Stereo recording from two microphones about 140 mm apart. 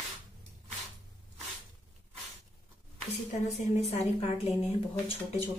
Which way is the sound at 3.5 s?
50° left (ahead or behind).